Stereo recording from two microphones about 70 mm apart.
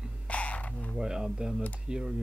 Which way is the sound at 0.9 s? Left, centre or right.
Centre.